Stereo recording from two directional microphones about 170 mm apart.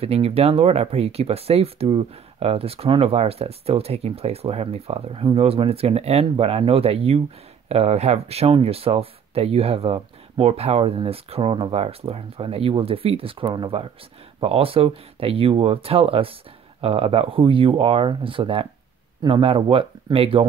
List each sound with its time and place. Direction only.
0.0 s speech: 35° right (ahead or behind)